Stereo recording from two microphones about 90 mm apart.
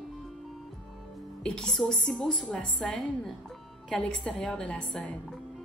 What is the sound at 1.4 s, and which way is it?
A woman's voice, 10° left (ahead or behind).